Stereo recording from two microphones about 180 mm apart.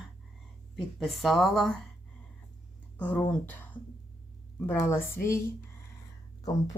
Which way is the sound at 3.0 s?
10° left (ahead or behind).